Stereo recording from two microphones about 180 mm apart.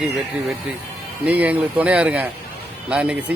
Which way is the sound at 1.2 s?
10° right (ahead or behind).